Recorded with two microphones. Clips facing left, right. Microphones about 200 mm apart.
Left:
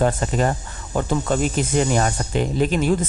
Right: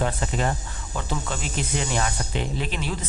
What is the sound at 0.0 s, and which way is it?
Speech, 45° left (ahead or behind).